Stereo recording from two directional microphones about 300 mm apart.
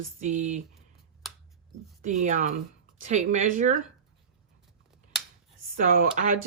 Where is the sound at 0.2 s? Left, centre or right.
Right.